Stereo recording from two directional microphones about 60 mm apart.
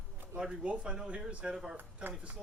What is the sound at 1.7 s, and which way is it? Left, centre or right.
Speech, right.